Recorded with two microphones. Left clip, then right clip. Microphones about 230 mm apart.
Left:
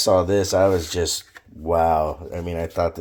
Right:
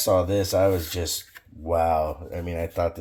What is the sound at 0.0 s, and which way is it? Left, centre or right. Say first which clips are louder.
Speech: left 4 dB; left.